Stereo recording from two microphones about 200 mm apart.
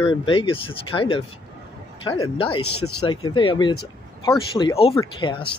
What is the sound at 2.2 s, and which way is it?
Speech, 25° left (ahead or behind).